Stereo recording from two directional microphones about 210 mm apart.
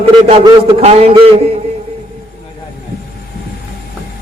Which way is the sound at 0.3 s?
25° right (ahead or behind).